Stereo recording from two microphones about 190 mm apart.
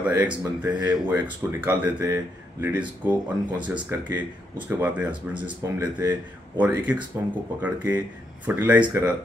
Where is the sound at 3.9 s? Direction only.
10° right (ahead or behind).